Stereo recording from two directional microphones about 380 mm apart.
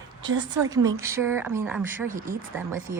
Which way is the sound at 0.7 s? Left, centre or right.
Centre.